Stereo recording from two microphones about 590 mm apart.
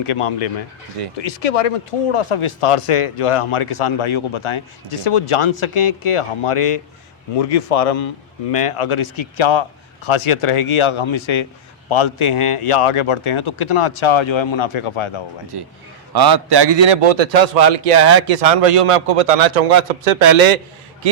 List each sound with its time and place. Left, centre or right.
0.0 s speech: left
7.3 s a man's voice: left
15.5 s a man's voice: right